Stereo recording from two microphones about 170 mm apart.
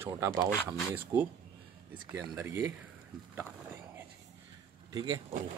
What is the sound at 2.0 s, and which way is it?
Speech, 20° right (ahead or behind).